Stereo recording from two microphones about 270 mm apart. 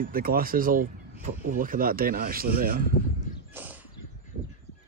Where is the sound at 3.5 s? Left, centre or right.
Centre.